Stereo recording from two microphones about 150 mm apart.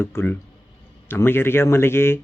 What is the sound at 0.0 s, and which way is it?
A man's voice, 15° left (ahead or behind).